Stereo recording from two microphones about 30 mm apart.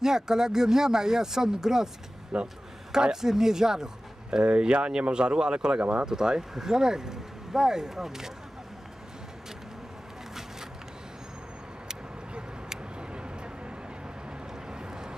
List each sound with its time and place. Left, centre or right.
0.0 s speech: centre
2.3 s speech: right
3.0 s speech: centre
4.4 s speech: right
6.0 s speech: right
12.6 s vehicle: right